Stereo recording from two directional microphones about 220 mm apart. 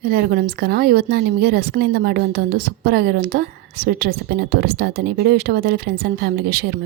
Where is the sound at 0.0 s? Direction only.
45° right (ahead or behind).